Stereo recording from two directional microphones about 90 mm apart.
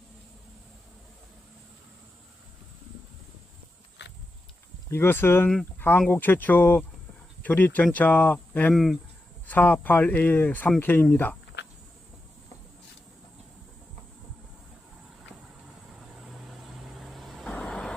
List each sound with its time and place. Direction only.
4.9 s speech: 25° left (ahead or behind)
8.7 s speech: 5° left (ahead or behind)
9.5 s speech: 20° left (ahead or behind)
16.2 s vehicle: centre (ahead or behind)